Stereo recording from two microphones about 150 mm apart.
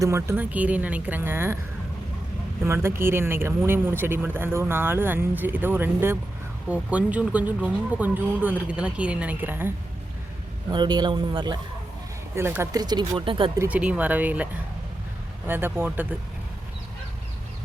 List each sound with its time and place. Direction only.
0.0 s speech: 15° right (ahead or behind)
2.6 s speech: 15° right (ahead or behind)
10.7 s a man's voice: 30° right (ahead or behind)
12.3 s speech: 15° right (ahead or behind)
12.8 s speech: 30° right (ahead or behind)
13.6 s speech: 10° right (ahead or behind)
15.4 s speech: 15° right (ahead or behind)